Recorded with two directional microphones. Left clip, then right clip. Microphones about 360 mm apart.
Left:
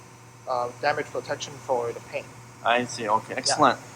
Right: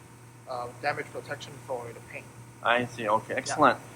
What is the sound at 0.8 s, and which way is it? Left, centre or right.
Speech, centre.